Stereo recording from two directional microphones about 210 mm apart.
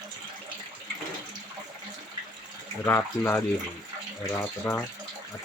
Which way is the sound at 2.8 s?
10° left (ahead or behind).